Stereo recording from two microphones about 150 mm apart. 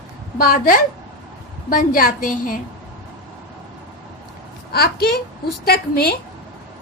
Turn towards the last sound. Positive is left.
turn(degrees=90)